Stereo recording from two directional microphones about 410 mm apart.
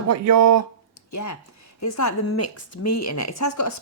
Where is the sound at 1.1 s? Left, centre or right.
Left.